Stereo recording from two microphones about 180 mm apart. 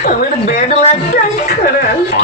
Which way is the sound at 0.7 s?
40° left (ahead or behind).